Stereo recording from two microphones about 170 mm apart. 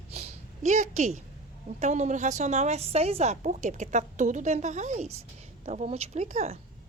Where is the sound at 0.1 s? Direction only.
40° right (ahead or behind).